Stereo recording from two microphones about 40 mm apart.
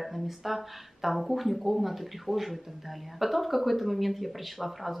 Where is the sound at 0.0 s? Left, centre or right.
Centre.